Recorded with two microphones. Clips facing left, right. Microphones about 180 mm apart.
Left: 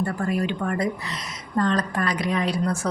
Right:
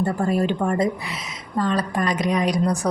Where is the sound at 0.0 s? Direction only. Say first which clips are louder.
Right 4 dB; 30° right (ahead or behind).